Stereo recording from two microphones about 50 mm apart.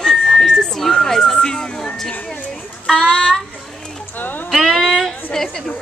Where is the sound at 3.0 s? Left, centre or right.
Left.